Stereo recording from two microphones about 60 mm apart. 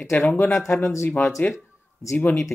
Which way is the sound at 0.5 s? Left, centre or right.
Left.